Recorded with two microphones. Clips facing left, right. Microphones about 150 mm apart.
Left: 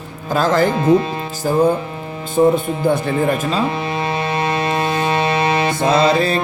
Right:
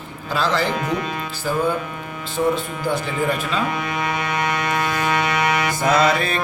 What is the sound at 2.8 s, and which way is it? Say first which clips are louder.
Speech: left 5 dB; 50° left (ahead or behind).